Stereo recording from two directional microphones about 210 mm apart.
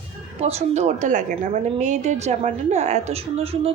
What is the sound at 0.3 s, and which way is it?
A woman's voice, 30° right (ahead or behind).